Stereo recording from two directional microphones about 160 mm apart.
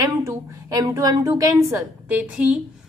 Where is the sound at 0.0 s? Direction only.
20° right (ahead or behind).